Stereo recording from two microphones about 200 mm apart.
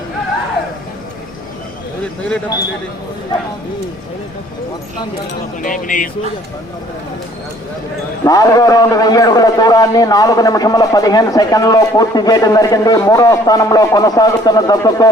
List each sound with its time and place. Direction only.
5.6 s speech: 40° left (ahead or behind)
8.2 s a man's voice: 15° left (ahead or behind)